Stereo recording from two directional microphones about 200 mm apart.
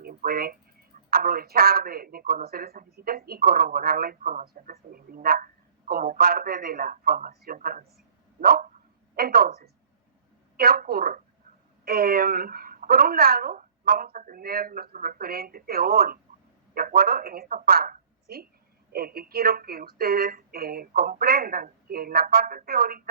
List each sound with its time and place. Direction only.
0.0 s speech: 50° right (ahead or behind)
8.4 s dog: 50° right (ahead or behind)
9.1 s speech: 50° right (ahead or behind)
10.6 s a woman's voice: 50° right (ahead or behind)